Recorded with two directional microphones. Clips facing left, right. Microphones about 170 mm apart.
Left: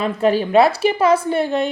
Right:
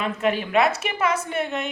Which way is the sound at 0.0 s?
35° left (ahead or behind).